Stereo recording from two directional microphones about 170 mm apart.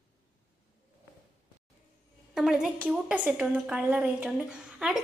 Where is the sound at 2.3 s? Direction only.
5° right (ahead or behind).